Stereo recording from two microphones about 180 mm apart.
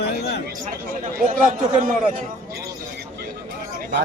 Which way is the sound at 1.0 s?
45° right (ahead or behind).